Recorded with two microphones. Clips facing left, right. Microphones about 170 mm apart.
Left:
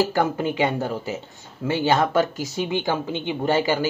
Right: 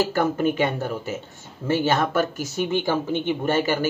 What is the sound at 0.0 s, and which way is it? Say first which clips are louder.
A woman's voice: even; 15° left (ahead or behind).